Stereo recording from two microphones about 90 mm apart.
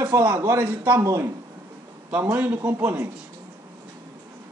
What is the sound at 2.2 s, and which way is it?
Speech, 20° right (ahead or behind).